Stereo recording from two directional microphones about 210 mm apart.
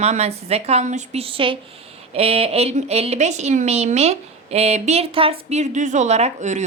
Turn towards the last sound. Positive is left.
turn(degrees=-35)  # may be behind; listen again after turning